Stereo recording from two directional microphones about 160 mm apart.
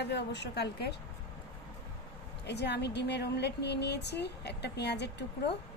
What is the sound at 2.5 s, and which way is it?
Speech, 90° left.